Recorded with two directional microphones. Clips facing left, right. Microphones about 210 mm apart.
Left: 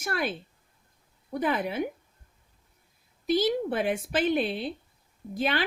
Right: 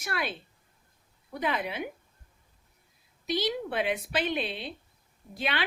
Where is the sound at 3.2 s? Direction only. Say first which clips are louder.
Left 5 dB; 50° left (ahead or behind).